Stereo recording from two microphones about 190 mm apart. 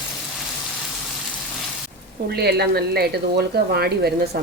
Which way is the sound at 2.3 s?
60° right (ahead or behind).